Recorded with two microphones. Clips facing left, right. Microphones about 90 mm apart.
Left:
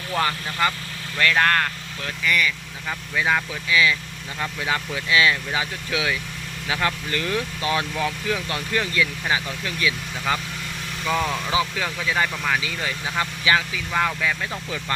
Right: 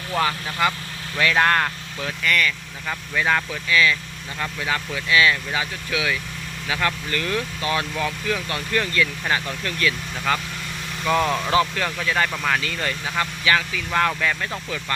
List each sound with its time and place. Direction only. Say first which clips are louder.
0.1 s speech: right 1 dB; 5° right (ahead or behind)
2.2 s speech: even; 10° left (ahead or behind)
11.0 s speech: right 3 dB; 5° right (ahead or behind)
11.5 s speech: right 3 dB; 10° left (ahead or behind)
12.3 s speech: right 1 dB; 5° right (ahead or behind)
12.5 s speech: right 1 dB; 10° left (ahead or behind)